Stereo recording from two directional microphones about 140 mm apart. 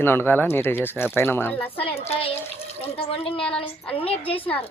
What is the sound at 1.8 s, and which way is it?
A woman's voice, 45° left (ahead or behind).